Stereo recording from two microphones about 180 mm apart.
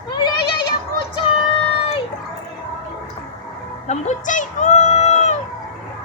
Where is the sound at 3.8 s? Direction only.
45° left (ahead or behind).